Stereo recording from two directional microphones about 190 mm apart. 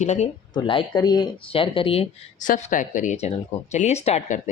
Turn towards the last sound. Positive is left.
turn(degrees=40)  # may be behind; listen again after turning